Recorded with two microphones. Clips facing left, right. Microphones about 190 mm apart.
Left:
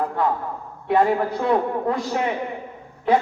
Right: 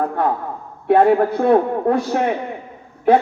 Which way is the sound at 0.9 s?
55° right (ahead or behind).